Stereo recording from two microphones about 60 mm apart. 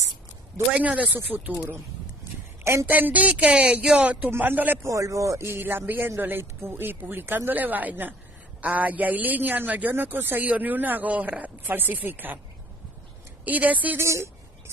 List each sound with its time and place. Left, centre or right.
0.7 s a man's voice: centre
2.6 s speech: right
2.9 s a man's voice: right
4.8 s speech: right
5.4 s a man's voice: right
13.4 s speech: right
13.9 s speech: right